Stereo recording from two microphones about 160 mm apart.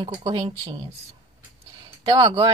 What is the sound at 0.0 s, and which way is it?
Speech, 30° right (ahead or behind).